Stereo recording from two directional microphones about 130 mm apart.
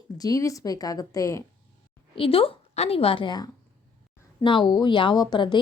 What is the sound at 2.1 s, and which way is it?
A woman's voice, 45° left (ahead or behind).